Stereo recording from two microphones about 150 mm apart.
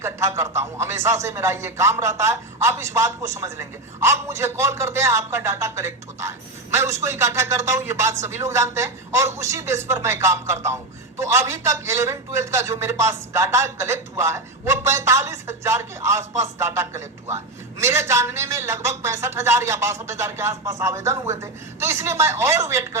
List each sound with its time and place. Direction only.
0.0 s a man's voice: 20° right (ahead or behind)